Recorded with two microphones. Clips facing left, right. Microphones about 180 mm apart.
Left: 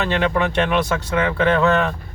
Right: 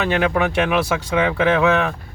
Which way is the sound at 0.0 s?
10° right (ahead or behind).